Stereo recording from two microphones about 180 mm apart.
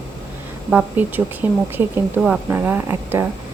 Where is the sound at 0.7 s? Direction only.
10° right (ahead or behind).